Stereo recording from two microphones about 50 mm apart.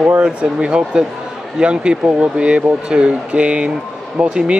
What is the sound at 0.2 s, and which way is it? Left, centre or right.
Speech, centre.